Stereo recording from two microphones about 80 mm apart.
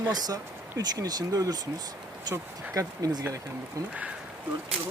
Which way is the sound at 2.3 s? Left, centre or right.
Right.